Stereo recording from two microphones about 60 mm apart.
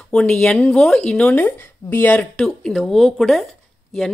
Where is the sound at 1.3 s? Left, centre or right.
Left.